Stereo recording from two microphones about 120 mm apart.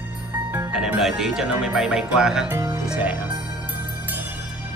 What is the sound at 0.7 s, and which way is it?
Speech, 5° right (ahead or behind).